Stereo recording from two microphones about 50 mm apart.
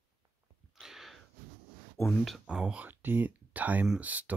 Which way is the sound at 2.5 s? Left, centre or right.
Centre.